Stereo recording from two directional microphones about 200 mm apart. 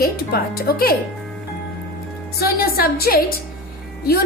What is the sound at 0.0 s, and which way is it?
Speech, 50° left (ahead or behind).